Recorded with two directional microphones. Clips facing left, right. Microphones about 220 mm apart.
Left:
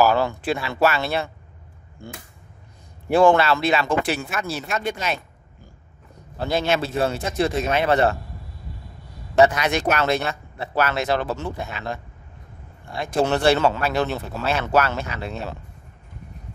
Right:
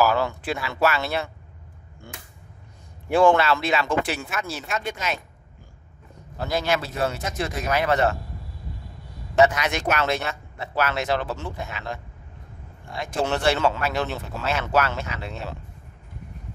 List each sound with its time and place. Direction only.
0.0 s speech: 30° left (ahead or behind)
3.1 s speech: 35° left (ahead or behind)
6.4 s speech: 25° left (ahead or behind)
9.3 s speech: 35° left (ahead or behind)
13.0 s speech: 35° left (ahead or behind)